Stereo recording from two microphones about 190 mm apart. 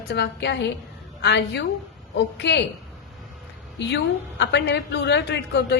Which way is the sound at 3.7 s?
65° left (ahead or behind).